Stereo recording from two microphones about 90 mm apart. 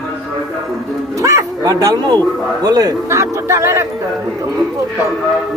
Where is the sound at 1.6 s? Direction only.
45° right (ahead or behind).